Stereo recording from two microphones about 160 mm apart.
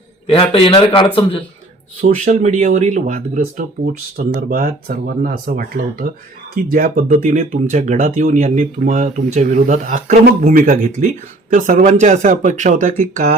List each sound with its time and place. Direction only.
0.3 s a man's voice: 35° left (ahead or behind)
2.0 s speech: 55° right (ahead or behind)
4.2 s speech: 65° right (ahead or behind); by 13.3 s 50° right (ahead or behind)